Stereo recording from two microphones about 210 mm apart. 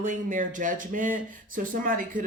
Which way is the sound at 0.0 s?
40° right (ahead or behind).